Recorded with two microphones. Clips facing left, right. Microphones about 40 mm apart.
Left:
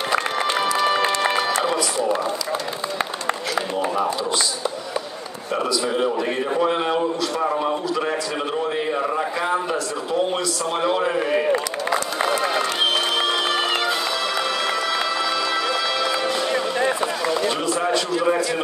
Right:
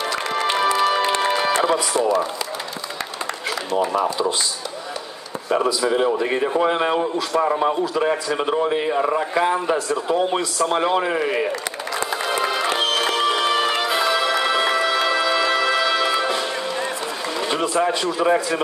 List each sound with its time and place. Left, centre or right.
6.6 s a man's voice: right
10.3 s a man's voice: right
13.8 s music: centre